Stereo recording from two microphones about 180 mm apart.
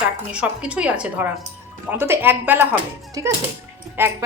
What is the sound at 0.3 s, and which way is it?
A woman's voice, 5° right (ahead or behind).